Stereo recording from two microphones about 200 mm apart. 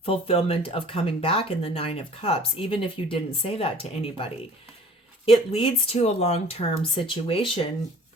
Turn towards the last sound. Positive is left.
turn(degrees=25)  # may be behind; listen again after turning